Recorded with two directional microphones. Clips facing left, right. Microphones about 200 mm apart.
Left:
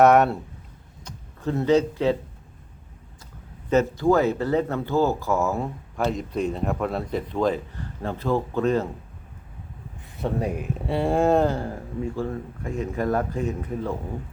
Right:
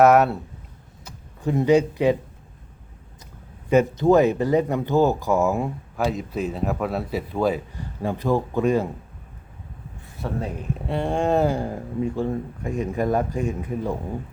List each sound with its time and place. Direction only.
0.0 s speech: centre (ahead or behind)
1.0 s speech: 15° right (ahead or behind)
3.7 s speech: 15° right (ahead or behind)
10.2 s speech: 15° left (ahead or behind)
10.8 s speech: centre (ahead or behind)
11.4 s speech: 15° right (ahead or behind)